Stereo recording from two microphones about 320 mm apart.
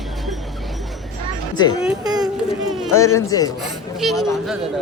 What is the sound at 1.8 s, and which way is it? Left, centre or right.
Speech, centre.